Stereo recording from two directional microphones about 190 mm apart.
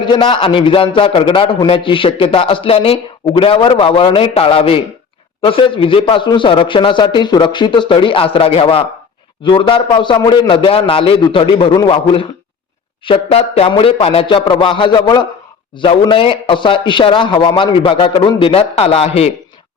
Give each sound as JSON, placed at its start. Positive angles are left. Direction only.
{"t": 0.0, "sound": "a man's voice", "side_deg": 25}